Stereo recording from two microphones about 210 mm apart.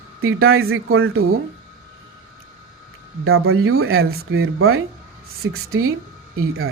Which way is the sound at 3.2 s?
80° right.